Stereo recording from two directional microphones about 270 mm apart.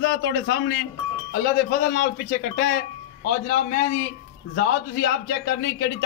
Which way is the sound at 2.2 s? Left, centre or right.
Left.